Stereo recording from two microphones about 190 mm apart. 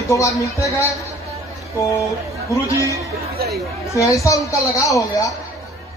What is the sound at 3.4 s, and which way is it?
Speech, 55° right (ahead or behind).